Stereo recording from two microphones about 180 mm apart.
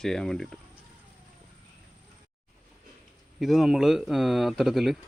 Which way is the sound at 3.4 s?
Centre (ahead or behind).